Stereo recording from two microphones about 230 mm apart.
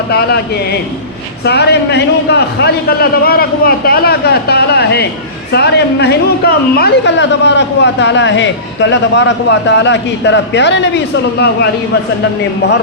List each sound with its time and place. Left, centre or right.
0.1 s speech: left